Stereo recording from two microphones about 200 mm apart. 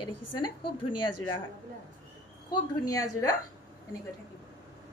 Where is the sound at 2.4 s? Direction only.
15° left (ahead or behind).